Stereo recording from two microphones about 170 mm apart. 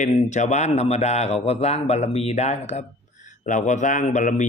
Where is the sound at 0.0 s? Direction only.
45° left (ahead or behind).